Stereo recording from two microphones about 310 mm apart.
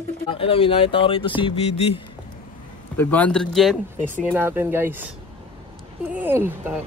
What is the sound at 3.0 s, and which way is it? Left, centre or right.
Speech, centre.